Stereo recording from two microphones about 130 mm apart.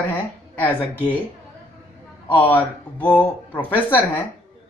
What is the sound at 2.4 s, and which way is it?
Speech, 10° left (ahead or behind).